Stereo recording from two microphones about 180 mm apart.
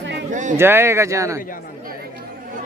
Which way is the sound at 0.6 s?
15° right (ahead or behind).